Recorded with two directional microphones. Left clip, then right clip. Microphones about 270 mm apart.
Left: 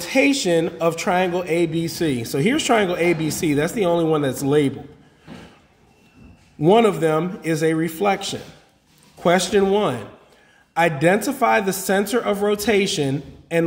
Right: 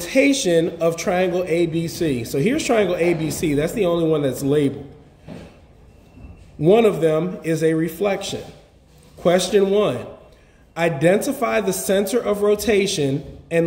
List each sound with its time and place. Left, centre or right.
0.0 s a sound: left
0.5 s a man's voice: left
6.6 s a man's voice: left
11.3 s a man's voice: left